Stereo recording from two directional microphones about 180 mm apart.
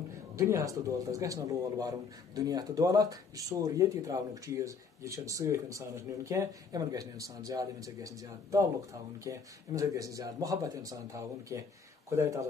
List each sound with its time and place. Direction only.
0.4 s a man's voice: 15° right (ahead or behind)